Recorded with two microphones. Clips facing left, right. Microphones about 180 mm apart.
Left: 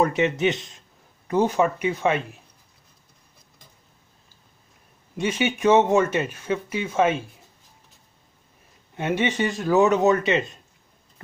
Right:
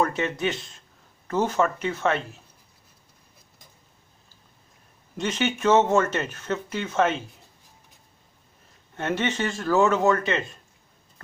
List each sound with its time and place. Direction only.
0.0 s speech: 20° left (ahead or behind)
5.1 s speech: 10° left (ahead or behind)
8.9 s speech: 10° left (ahead or behind)